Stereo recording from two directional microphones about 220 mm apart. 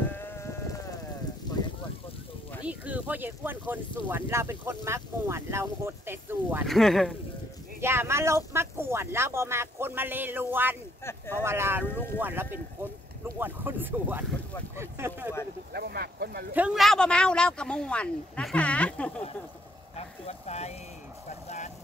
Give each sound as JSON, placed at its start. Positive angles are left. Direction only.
{"t": 0.1, "sound": "sheep", "side_deg": 10}
{"t": 2.6, "sound": "speech", "side_deg": -5}
{"t": 6.7, "sound": "speech", "side_deg": 0}
{"t": 7.8, "sound": "speech", "side_deg": -10}
{"t": 11.1, "sound": "speech", "side_deg": 10}
{"t": 11.4, "sound": "speech", "side_deg": -10}
{"t": 15.7, "sound": "speech", "side_deg": -45}
{"t": 16.5, "sound": "speech", "side_deg": -5}
{"t": 20.2, "sound": "speech", "side_deg": 30}
{"t": 21.5, "sound": "vehicle", "side_deg": 30}